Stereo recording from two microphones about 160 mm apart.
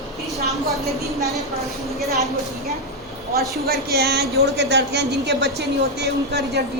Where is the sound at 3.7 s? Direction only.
80° right.